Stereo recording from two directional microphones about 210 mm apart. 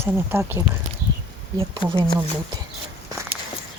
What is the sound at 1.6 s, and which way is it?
Speech, 25° right (ahead or behind).